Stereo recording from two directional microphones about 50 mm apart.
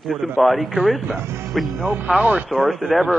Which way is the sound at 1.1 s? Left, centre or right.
Right.